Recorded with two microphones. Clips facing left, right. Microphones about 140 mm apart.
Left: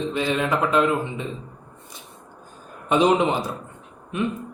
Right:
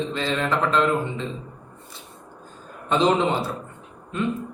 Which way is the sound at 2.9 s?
15° left (ahead or behind).